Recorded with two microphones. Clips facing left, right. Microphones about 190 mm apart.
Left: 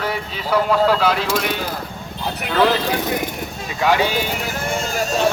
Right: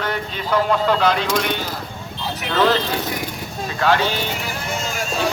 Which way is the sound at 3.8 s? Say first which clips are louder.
Left 1 dB; 10° left (ahead or behind).